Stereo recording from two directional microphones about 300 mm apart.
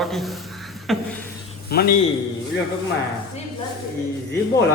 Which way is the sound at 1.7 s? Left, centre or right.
Left.